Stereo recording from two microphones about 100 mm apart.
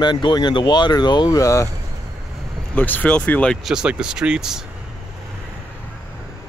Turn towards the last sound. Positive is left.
turn(degrees=-5)  # may be behind; listen again after turning